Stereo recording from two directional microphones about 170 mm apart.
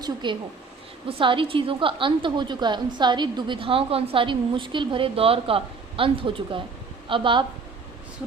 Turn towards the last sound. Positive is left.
turn(degrees=-30)  # may be behind; listen again after turning